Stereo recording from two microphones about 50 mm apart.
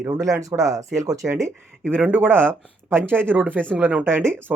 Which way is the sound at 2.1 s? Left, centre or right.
Right.